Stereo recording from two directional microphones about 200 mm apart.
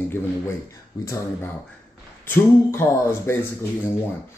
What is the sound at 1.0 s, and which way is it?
Speech, 15° left (ahead or behind).